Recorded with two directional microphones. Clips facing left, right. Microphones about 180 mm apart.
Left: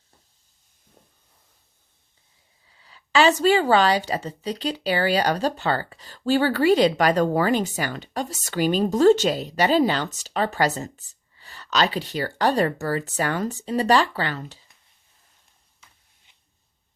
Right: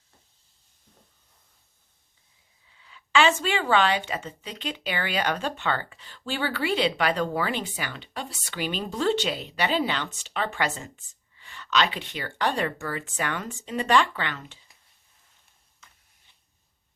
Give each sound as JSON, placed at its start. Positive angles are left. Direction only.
{"t": 2.6, "sound": "speech", "side_deg": 35}